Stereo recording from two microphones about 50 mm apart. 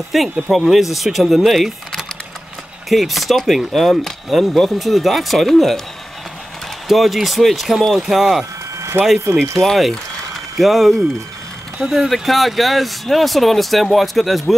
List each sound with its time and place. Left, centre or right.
0.1 s speech: centre
6.9 s speech: centre
9.0 s speech: right
9.6 s speech: centre